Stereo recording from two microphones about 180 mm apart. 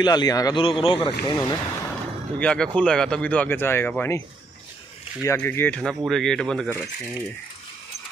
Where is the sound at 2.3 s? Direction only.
5° left (ahead or behind).